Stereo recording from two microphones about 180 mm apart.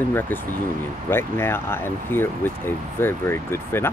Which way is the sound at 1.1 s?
15° left (ahead or behind).